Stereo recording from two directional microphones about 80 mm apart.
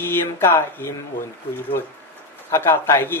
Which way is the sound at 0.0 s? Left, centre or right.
Left.